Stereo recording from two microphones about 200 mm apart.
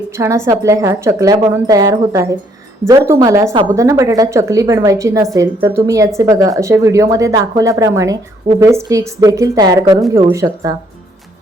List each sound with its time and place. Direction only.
0.2 s a woman's voice: 15° right (ahead or behind)